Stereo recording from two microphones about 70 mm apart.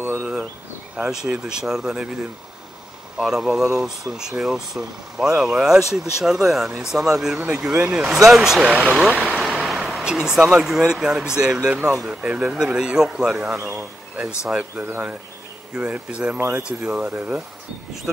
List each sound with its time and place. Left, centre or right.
0.0 s a sound: centre
0.9 s speech: centre
3.2 s speech: centre
9.0 s speech: centre
9.4 s speech: centre
13.7 s speech: right
14.8 s speech: right